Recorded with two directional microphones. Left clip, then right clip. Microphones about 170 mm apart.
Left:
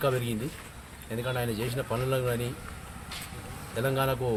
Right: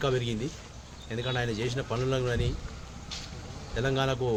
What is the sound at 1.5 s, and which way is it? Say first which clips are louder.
Speech: even; centre (ahead or behind).